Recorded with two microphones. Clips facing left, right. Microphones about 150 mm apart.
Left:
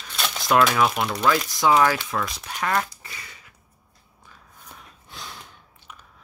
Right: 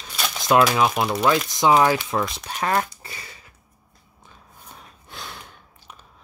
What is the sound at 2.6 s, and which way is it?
Duck, 35° right (ahead or behind).